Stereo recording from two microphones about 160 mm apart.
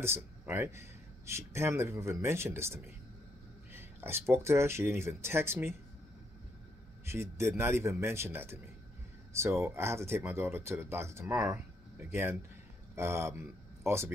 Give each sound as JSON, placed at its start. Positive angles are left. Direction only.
{"t": 0.0, "sound": "speech", "side_deg": -15}
{"t": 7.1, "sound": "speech", "side_deg": -15}